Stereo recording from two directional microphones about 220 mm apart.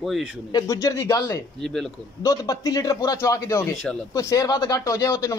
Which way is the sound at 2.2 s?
15° left (ahead or behind).